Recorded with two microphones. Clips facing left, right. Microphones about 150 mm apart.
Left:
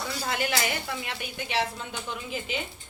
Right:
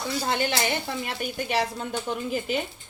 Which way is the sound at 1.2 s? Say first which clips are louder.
Right 4 dB; 45° right (ahead or behind).